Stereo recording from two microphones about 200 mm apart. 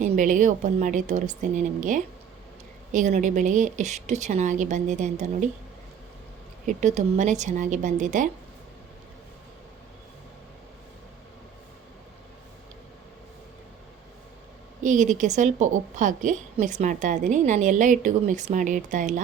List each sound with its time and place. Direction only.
0.0 s a woman's voice: 40° right (ahead or behind)
6.7 s a woman's voice: 35° right (ahead or behind)
14.8 s a woman's voice: 40° right (ahead or behind)